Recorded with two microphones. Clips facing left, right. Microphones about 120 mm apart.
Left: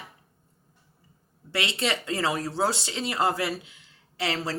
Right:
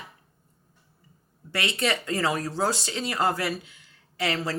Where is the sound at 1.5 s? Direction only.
25° left (ahead or behind).